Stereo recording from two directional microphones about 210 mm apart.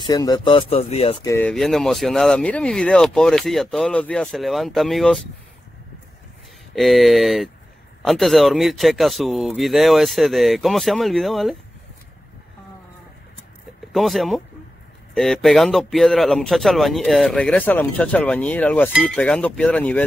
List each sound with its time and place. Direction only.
0.0 s speech: 15° left (ahead or behind)
1.2 s speech: 15° left (ahead or behind)
1.5 s speech: centre (ahead or behind)
6.7 s speech: centre (ahead or behind)
13.9 s speech: centre (ahead or behind)